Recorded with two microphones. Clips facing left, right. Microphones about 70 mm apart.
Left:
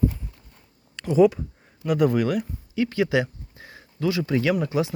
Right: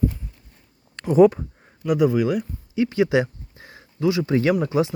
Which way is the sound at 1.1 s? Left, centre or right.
Right.